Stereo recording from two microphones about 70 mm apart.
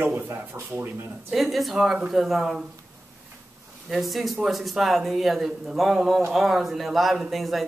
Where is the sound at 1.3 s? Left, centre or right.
Centre.